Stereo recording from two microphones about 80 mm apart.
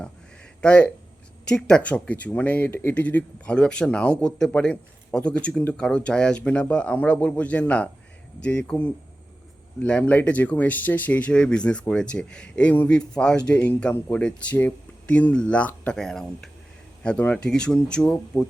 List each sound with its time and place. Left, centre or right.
0.6 s speech: centre
9.8 s speech: centre
16.0 s speech: centre